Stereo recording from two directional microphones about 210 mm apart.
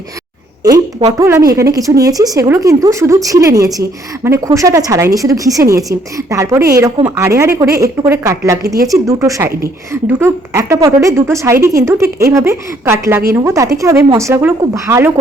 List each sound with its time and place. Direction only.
0.6 s a woman's voice: 15° right (ahead or behind)